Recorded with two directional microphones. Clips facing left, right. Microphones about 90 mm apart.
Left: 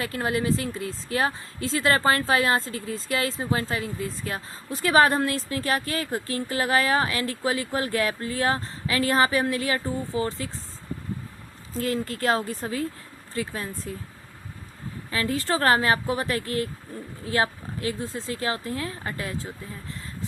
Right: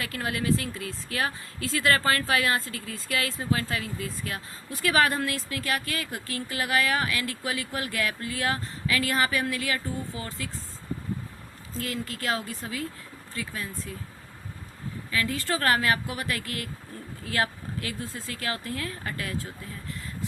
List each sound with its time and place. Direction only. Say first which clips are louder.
0.0 s speech: left 4 dB; 30° left (ahead or behind)
11.8 s speech: left 6 dB; 35° left (ahead or behind)
15.1 s speech: left 3 dB; 30° left (ahead or behind)